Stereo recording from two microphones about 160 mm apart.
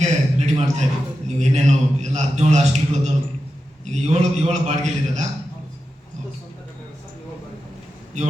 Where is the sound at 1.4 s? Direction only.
45° right (ahead or behind).